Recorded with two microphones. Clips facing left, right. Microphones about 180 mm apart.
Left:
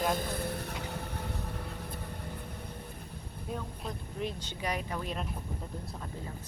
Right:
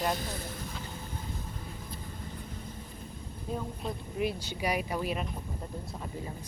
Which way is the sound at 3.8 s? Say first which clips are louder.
Right 4 dB; 10° right (ahead or behind).